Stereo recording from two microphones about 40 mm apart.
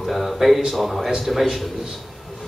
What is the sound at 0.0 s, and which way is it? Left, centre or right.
Speech, centre.